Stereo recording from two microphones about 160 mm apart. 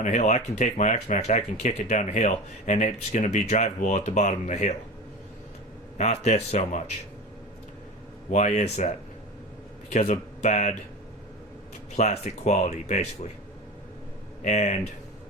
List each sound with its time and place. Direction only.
0.0 s speech: 45° left (ahead or behind)
6.0 s speech: 45° left (ahead or behind)
8.3 s speech: 45° left (ahead or behind)
9.9 s speech: 45° left (ahead or behind)
11.9 s speech: 40° left (ahead or behind)
14.4 s speech: 45° left (ahead or behind)